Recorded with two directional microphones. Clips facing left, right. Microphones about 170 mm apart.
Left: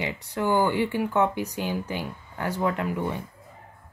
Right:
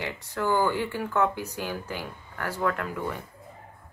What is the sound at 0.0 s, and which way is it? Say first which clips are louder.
Speech: left 2 dB; 15° left (ahead or behind).